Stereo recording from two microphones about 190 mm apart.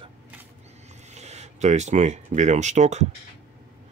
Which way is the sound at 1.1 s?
35° right (ahead or behind).